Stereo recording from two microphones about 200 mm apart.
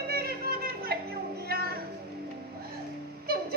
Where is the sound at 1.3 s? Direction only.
50° right (ahead or behind).